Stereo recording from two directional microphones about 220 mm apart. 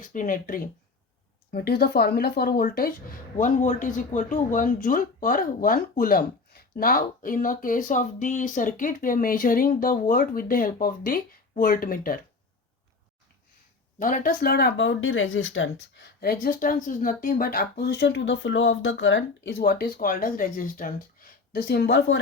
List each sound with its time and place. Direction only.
0.0 s speech: 35° left (ahead or behind)
14.0 s speech: 40° left (ahead or behind)